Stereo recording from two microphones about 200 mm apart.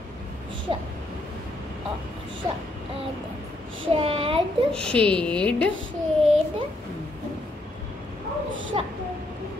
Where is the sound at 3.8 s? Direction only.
25° right (ahead or behind).